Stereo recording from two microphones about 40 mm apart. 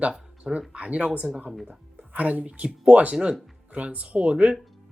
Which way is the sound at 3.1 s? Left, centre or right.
Right.